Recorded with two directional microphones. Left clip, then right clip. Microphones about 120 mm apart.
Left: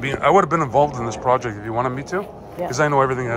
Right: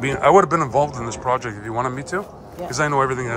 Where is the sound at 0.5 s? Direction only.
25° right (ahead or behind).